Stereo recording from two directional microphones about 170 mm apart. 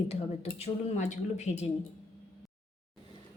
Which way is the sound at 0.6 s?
45° left (ahead or behind).